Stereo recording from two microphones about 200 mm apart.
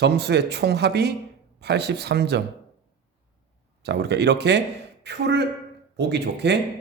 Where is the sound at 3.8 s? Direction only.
55° right (ahead or behind).